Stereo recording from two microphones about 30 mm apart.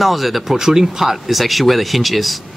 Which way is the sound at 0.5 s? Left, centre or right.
Centre.